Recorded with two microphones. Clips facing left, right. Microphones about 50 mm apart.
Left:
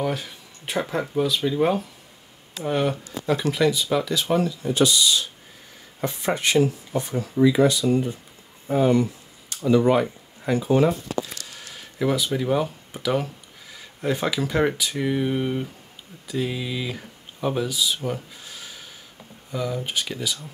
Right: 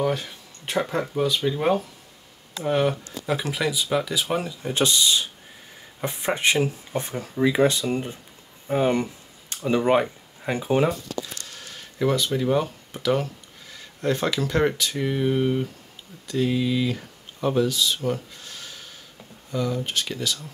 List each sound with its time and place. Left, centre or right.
0.0 s speech: centre
4.6 s speech: right
6.0 s speech: right
7.0 s speech: right
11.4 s speech: centre